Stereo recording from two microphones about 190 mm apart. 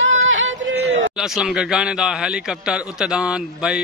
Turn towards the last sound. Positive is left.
turn(degrees=-5)  # may be behind; listen again after turning